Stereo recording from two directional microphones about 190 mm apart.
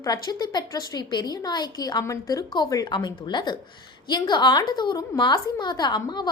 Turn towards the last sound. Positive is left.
turn(degrees=20)  # may be behind; listen again after turning